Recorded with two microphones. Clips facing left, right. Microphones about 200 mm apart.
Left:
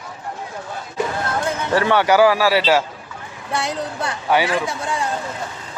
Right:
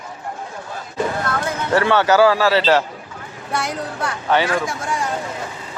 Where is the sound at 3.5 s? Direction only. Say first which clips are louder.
Left 1 dB; 30° left (ahead or behind).